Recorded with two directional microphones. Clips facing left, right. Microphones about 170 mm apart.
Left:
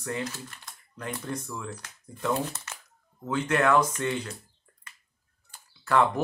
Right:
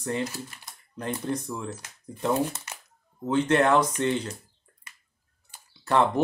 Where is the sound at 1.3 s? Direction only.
35° right (ahead or behind).